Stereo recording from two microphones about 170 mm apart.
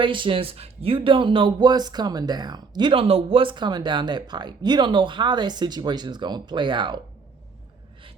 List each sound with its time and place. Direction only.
0.0 s speech: 30° right (ahead or behind)